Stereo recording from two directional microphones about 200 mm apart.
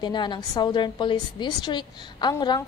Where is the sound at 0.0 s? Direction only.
20° left (ahead or behind).